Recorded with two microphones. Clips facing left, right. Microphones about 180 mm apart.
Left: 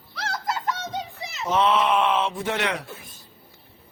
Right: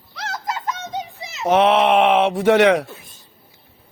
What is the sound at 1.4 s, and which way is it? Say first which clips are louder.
Speech: right 6 dB; 70° right (ahead or behind).